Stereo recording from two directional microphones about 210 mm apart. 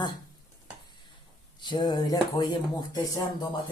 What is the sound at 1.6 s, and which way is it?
Speech, 20° left (ahead or behind).